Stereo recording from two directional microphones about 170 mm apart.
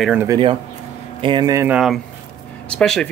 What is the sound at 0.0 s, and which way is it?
Speech, 5° right (ahead or behind).